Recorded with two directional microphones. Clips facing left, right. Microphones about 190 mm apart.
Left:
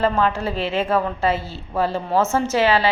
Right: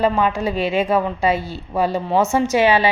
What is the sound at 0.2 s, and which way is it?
A woman's voice, 15° right (ahead or behind).